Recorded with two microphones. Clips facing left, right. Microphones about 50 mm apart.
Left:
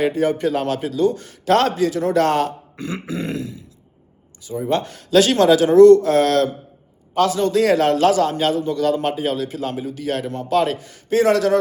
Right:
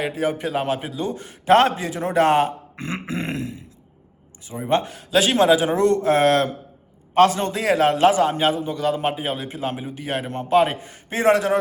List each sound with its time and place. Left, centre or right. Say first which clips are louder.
0.0 s a man's voice: left 5 dB; centre
2.7 s a sound: left 1 dB; right
4.4 s a man's voice: left 1 dB; right
4.9 s a man's voice: left 4 dB; centre; by 7.5 s right
7.5 s a man's voice: left 3 dB; centre